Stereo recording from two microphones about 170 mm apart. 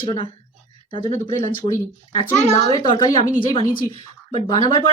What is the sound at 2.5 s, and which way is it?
A child's voice, 25° left (ahead or behind).